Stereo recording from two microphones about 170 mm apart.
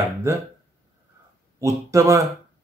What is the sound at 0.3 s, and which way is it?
Speech, 15° right (ahead or behind).